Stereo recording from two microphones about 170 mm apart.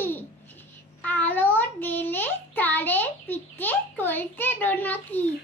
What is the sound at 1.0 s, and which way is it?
Child singing, 10° left (ahead or behind).